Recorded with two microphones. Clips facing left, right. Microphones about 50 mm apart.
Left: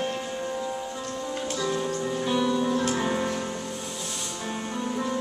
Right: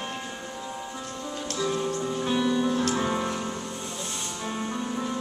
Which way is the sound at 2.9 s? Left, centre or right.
Centre.